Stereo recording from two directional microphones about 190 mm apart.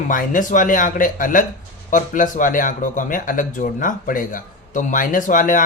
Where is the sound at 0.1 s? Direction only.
45° left (ahead or behind).